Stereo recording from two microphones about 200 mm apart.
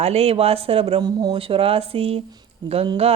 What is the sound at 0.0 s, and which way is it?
Speech, 30° right (ahead or behind).